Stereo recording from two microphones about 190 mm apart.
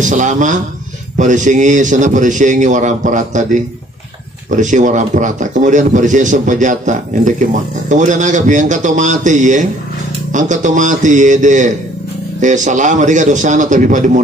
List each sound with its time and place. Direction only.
0.0 s speech: 40° right (ahead or behind)
4.5 s speech: 40° right (ahead or behind)